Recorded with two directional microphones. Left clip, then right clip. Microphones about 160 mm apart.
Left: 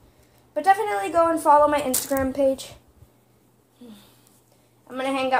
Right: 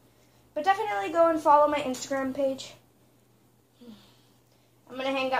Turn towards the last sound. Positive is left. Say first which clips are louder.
# left 5 dB
turn(degrees=50)  # may be behind; listen again after turning